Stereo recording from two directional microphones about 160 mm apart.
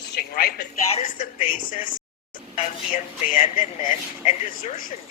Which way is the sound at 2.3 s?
55° left (ahead or behind).